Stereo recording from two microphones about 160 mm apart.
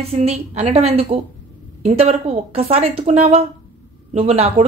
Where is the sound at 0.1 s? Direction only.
40° right (ahead or behind).